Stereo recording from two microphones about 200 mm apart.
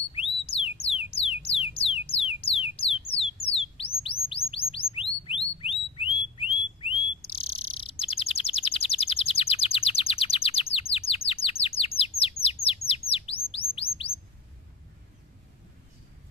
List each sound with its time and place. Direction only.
0.1 s a sound: 30° left (ahead or behind)
0.8 s music: 30° left (ahead or behind)
4.0 s chirp: 30° left (ahead or behind)
8.0 s bird: 30° left (ahead or behind)
11.4 s chirp: 30° left (ahead or behind)